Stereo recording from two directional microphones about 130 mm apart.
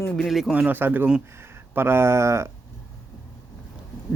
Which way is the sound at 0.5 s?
15° right (ahead or behind).